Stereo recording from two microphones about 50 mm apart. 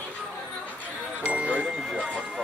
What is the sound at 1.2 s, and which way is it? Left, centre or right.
Music, right.